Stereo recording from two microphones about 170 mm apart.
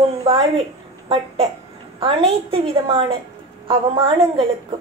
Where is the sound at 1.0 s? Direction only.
30° right (ahead or behind).